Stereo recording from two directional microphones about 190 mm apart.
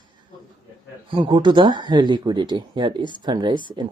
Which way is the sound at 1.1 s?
25° right (ahead or behind).